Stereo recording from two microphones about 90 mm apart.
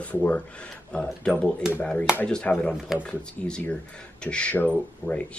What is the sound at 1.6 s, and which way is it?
Speech, 5° right (ahead or behind).